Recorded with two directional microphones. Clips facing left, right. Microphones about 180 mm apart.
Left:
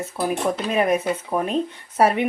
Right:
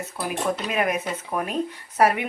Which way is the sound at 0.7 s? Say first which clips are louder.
Left 5 dB; 30° left (ahead or behind).